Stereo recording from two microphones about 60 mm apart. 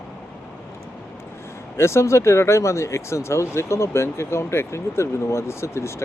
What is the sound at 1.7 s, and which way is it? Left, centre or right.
Speech, left.